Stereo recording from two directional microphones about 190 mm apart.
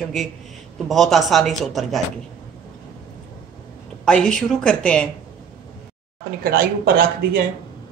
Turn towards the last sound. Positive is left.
turn(degrees=-50)  # may be behind; listen again after turning